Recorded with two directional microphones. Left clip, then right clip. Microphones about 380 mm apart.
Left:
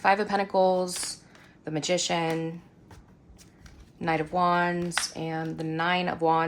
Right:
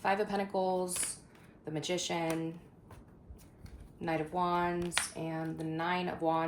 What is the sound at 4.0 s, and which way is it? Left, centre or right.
Speech, left.